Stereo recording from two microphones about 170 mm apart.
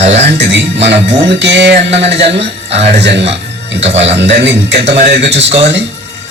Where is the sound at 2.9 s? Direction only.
80° right.